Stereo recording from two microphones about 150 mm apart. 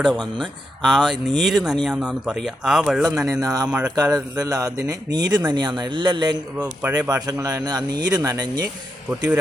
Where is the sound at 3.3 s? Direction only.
25° right (ahead or behind).